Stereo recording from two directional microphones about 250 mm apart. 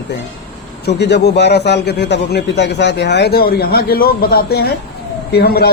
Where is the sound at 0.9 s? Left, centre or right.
Left.